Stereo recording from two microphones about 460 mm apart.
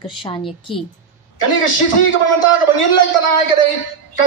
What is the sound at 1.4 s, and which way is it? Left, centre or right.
A man's voice, left.